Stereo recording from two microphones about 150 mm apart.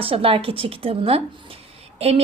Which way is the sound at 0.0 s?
40° right (ahead or behind).